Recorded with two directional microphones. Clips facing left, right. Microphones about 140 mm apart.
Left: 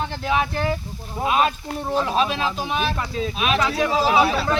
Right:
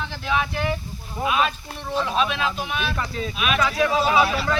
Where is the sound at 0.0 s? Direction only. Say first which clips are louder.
Left 3 dB; 40° left (ahead or behind).